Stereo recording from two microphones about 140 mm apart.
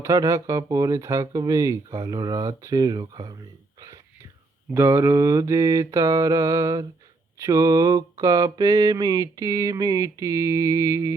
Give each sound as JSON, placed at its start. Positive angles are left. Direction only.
{"t": 0.0, "sound": "mantra", "side_deg": -25}
{"t": 4.7, "sound": "mantra", "side_deg": -20}